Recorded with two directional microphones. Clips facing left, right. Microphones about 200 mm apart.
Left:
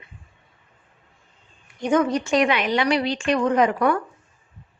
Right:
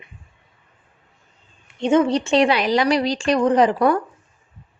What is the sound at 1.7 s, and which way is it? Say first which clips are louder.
A woman's voice: right 3 dB; 25° right (ahead or behind).